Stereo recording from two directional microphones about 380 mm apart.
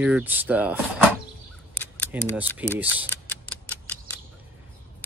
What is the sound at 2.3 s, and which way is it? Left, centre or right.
Speech, centre.